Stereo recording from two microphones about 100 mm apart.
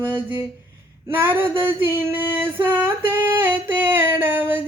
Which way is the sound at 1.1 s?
20° right (ahead or behind).